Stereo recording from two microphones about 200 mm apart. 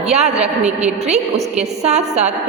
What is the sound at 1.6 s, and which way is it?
Speech, 35° right (ahead or behind).